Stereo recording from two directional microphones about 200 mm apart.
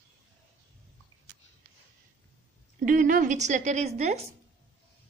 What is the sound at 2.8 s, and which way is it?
A woman's voice, 40° right (ahead or behind).